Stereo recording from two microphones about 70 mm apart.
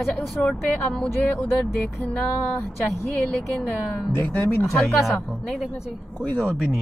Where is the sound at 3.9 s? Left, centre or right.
Left.